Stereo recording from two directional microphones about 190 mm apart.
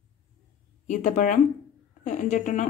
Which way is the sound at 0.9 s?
40° left (ahead or behind).